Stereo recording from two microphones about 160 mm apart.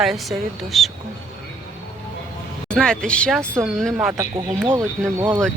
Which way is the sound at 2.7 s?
5° left (ahead or behind).